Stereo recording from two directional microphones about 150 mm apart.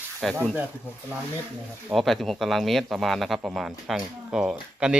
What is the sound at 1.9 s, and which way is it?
Speech, centre (ahead or behind).